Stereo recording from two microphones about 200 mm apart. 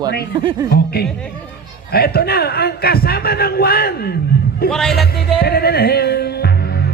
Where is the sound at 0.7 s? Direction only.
50° left (ahead or behind).